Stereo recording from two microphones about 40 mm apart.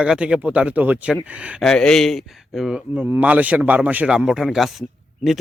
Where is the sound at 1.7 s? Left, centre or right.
Centre.